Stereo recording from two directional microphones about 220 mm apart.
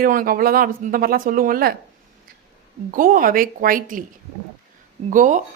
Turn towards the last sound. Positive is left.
turn(degrees=-35)  # may be behind; listen again after turning